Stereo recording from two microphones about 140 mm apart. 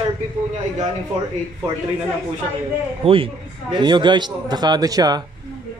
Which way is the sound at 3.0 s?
40° right (ahead or behind).